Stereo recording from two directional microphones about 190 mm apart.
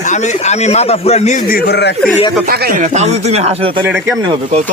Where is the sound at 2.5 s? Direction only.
50° right (ahead or behind); by 3.8 s 30° right (ahead or behind).